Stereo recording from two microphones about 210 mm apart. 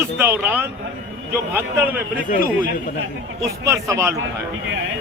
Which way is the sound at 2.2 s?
40° left (ahead or behind).